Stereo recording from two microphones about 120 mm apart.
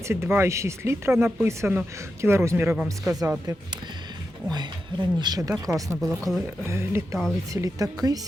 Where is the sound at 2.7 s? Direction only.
5° right (ahead or behind).